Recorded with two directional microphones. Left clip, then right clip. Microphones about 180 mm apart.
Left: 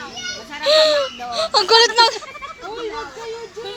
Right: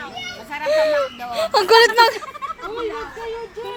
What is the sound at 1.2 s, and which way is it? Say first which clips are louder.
Baby cry: even; 20° right (ahead or behind).